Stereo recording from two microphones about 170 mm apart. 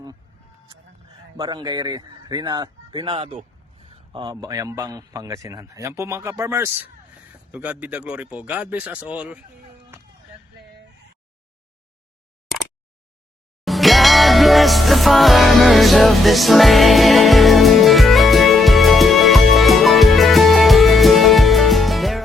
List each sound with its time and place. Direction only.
1.4 s a man's voice: 25° right (ahead or behind); by 9.4 s 10° right (ahead or behind)
13.7 s music: centre (ahead or behind)